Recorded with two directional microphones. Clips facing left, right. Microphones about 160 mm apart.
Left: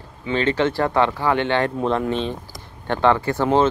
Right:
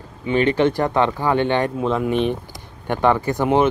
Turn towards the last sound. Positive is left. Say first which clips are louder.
# right 1 dB
turn(degrees=-15)  # may be behind; listen again after turning